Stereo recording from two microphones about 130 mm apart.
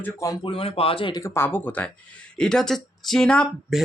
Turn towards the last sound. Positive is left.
turn(degrees=5)  # may be behind; listen again after turning